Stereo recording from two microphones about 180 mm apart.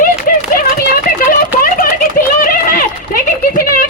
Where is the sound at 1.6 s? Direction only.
50° left (ahead or behind).